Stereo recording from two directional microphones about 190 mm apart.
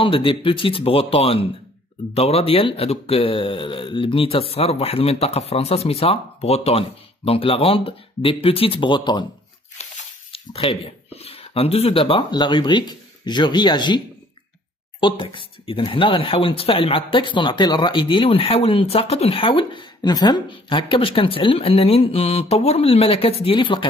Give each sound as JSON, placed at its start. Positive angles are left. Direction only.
{"t": 0.0, "sound": "speech", "side_deg": 25}
{"t": 9.8, "sound": "a sound", "side_deg": 35}
{"t": 11.1, "sound": "speech", "side_deg": 30}